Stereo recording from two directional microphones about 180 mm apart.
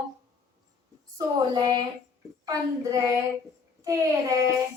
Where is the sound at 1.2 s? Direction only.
20° right (ahead or behind).